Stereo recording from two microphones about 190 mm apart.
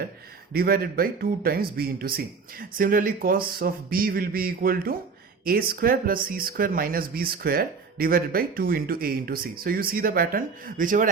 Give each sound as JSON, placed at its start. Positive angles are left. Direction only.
{"t": 0.5, "sound": "speech", "side_deg": -55}